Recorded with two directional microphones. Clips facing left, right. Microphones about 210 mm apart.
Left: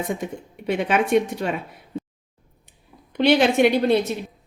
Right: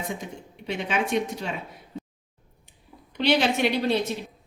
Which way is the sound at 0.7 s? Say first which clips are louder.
Left 7 dB; 55° left (ahead or behind).